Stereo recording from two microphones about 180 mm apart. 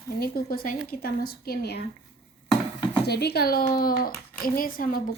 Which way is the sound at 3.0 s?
65° left (ahead or behind).